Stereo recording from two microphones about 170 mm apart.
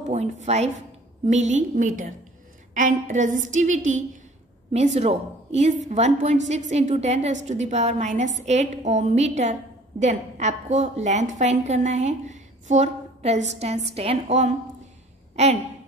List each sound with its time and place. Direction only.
0.0 s a woman's voice: 40° right (ahead or behind)